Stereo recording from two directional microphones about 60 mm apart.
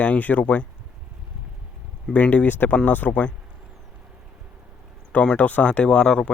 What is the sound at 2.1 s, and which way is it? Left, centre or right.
Speech, left.